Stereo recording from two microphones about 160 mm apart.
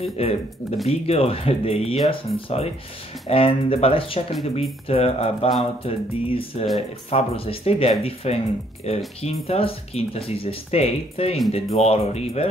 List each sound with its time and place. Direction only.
0.0 s speech: 40° left (ahead or behind)